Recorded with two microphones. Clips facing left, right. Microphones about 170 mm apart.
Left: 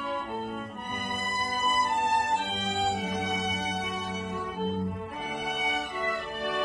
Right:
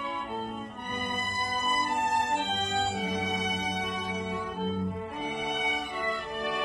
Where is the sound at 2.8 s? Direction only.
Centre (ahead or behind).